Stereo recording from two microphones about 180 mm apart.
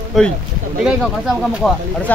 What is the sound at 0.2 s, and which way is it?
Speech, centre (ahead or behind).